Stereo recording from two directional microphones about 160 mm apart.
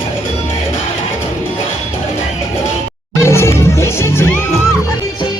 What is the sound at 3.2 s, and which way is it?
Music, 15° left (ahead or behind).